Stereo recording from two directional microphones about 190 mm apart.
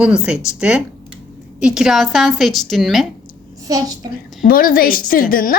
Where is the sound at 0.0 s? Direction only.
5° right (ahead or behind).